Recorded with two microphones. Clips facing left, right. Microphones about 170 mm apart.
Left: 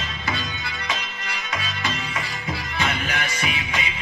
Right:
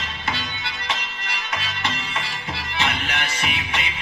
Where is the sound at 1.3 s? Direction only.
70° right (ahead or behind).